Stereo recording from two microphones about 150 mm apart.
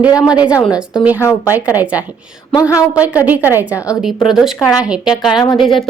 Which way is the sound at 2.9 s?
10° right (ahead or behind).